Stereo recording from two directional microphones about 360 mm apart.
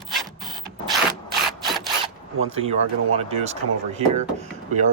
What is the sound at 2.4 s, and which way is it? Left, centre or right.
Speech, centre.